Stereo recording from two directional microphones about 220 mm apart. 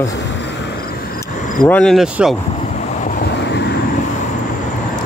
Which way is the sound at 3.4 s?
50° left (ahead or behind).